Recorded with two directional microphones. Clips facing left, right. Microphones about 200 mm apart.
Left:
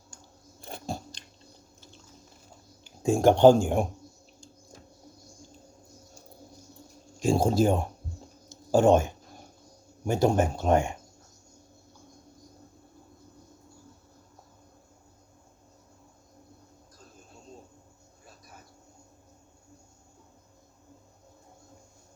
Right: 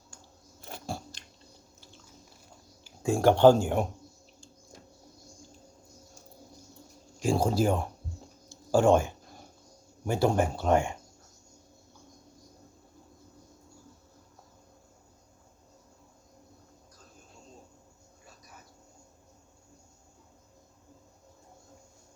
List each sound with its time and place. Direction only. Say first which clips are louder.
2.8 s speech: left 2 dB; 20° left (ahead or behind)
7.2 s speech: left 3 dB; 25° left (ahead or behind)
8.4 s a sound: left 2 dB; 20° left (ahead or behind)
10.1 s speech: left 2 dB; 20° left (ahead or behind)